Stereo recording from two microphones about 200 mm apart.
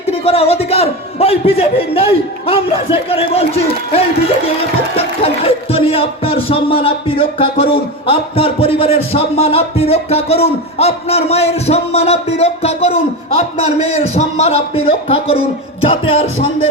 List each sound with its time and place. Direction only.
0.0 s speech: 30° left (ahead or behind)